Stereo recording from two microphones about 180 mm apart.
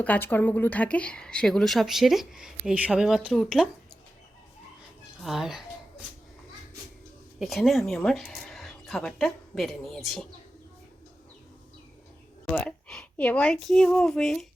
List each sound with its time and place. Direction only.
0.0 s speech: 10° left (ahead or behind)
5.2 s speech: centre (ahead or behind)
7.3 s speech: centre (ahead or behind)
12.5 s speech: 5° left (ahead or behind)